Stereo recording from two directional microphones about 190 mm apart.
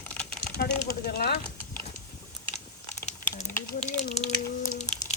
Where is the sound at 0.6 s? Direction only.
55° left (ahead or behind).